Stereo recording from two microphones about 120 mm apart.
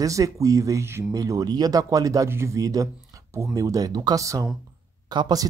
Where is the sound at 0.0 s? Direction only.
30° right (ahead or behind).